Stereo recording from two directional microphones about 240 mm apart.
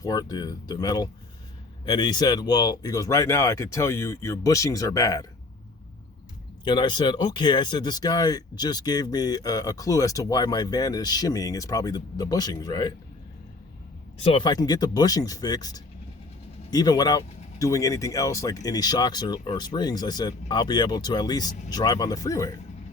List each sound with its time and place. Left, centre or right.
0.0 s speech: centre
6.7 s speech: centre
14.2 s speech: centre